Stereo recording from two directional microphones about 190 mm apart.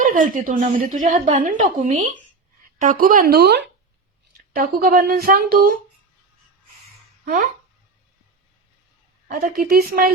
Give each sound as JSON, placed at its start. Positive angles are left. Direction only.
{"t": 0.0, "sound": "a woman's voice", "side_deg": -45}
{"t": 4.5, "sound": "speech", "side_deg": -50}
{"t": 9.2, "sound": "speech", "side_deg": -50}